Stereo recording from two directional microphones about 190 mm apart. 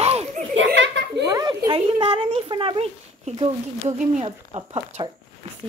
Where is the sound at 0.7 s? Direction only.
65° right (ahead or behind).